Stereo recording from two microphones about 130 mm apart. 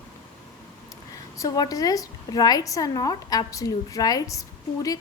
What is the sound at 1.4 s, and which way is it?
A woman's voice, 30° left (ahead or behind).